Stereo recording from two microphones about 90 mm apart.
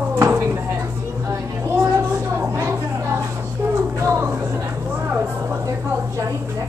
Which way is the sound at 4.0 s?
25° right (ahead or behind).